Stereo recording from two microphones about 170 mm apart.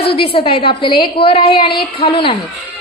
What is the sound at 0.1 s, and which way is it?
A woman's voice, 35° left (ahead or behind).